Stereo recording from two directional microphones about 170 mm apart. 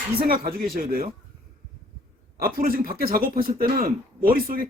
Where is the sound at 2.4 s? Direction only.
60° right (ahead or behind).